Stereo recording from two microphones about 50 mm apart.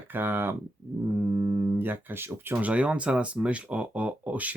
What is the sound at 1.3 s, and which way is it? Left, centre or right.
Speech, right.